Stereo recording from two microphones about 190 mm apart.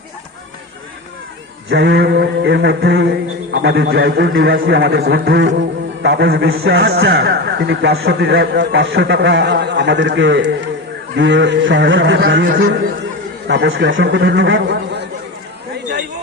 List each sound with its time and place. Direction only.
1.7 s mantra: 65° right (ahead or behind)
11.1 s speech: 70° right (ahead or behind)
13.5 s a man's voice: 70° right (ahead or behind)